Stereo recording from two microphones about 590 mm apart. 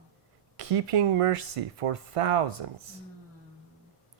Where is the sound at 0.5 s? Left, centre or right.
Right.